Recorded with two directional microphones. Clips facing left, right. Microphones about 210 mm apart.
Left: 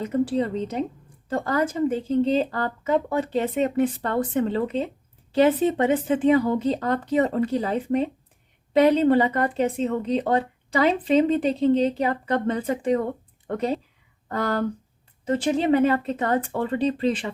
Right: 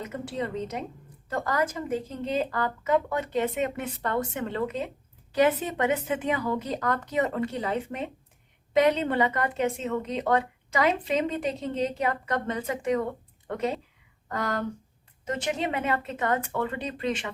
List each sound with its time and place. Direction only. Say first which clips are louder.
0.0 s speech: left 9 dB; 35° left (ahead or behind)
14.3 s speech: left 5 dB; 35° left (ahead or behind)